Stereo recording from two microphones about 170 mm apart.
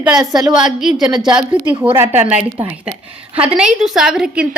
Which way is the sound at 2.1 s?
40° right (ahead or behind).